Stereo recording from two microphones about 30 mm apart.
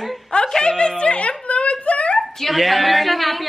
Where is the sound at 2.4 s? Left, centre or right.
Centre.